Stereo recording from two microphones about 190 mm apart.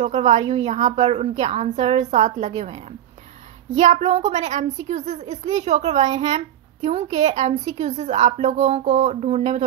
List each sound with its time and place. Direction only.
0.0 s speech: 35° right (ahead or behind)
3.7 s speech: 35° right (ahead or behind)